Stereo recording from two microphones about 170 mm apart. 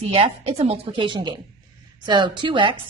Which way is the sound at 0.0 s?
35° right (ahead or behind).